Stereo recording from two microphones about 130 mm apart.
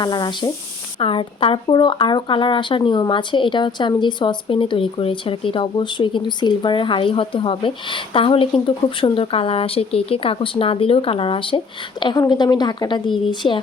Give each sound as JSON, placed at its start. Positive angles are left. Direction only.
{"t": 0.0, "sound": "speech", "side_deg": 35}